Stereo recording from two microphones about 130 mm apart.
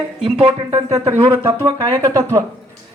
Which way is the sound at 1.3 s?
20° right (ahead or behind).